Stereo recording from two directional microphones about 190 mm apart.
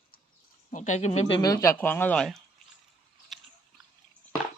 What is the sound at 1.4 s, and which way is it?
Speech, 15° left (ahead or behind).